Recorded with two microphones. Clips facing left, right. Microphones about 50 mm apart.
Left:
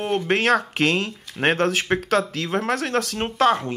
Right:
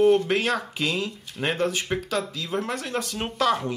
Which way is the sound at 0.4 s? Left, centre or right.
Left.